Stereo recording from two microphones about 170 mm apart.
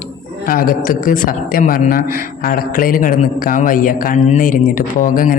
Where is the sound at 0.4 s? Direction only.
55° left (ahead or behind).